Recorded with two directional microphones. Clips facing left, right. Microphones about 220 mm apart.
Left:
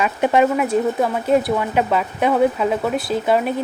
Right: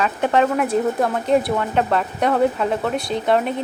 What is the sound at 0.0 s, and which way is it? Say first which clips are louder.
Speech: left 2 dB; 10° left (ahead or behind).